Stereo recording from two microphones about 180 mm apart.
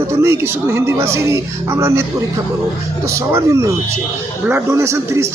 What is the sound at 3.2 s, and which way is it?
Speech, 15° right (ahead or behind).